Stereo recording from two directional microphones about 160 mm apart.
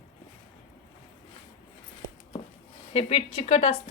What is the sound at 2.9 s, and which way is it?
Speech, 40° left (ahead or behind).